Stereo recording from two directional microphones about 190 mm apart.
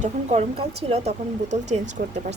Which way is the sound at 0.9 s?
35° right (ahead or behind).